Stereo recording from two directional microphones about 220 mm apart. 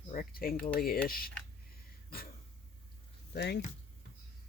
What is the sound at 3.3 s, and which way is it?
Speech, 50° left (ahead or behind).